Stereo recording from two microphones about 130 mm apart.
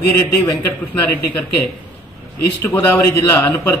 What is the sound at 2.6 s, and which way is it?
A man's voice, 20° left (ahead or behind).